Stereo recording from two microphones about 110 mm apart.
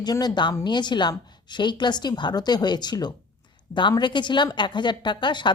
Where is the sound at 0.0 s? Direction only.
40° left (ahead or behind).